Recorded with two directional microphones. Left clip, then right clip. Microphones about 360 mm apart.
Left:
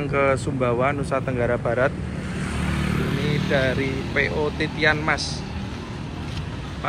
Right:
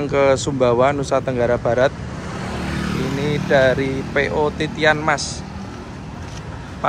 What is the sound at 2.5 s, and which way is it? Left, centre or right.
Vehicle, right.